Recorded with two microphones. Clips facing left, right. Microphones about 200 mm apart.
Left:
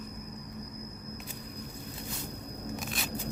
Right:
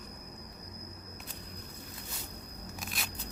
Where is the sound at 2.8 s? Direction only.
Centre (ahead or behind).